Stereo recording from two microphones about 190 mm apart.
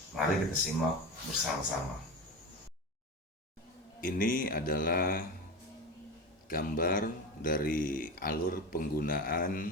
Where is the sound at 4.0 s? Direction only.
45° left (ahead or behind).